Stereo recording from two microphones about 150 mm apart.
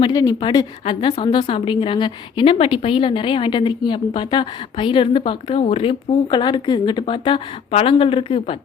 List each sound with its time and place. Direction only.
0.0 s a woman's voice: 25° left (ahead or behind)